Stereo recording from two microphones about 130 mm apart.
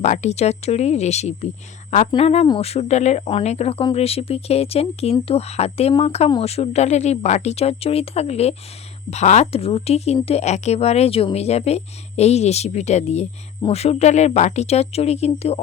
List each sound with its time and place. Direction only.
0.0 s a woman's voice: 60° left (ahead or behind)
2.0 s a woman's voice: 50° left (ahead or behind)